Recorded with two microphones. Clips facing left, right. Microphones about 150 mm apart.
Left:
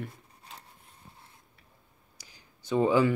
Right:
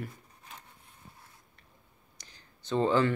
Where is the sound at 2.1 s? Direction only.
10° left (ahead or behind).